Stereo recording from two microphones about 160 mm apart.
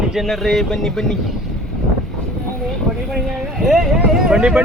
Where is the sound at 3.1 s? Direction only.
Centre (ahead or behind).